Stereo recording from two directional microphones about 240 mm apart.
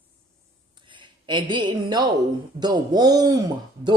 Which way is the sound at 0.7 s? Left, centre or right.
Centre.